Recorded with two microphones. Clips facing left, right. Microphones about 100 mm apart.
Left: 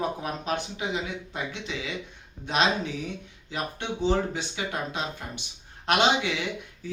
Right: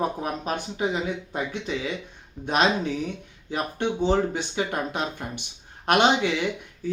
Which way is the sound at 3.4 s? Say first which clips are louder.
Right 5 dB; 50° right (ahead or behind).